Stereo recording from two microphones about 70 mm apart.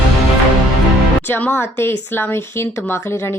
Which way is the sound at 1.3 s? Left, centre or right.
Left.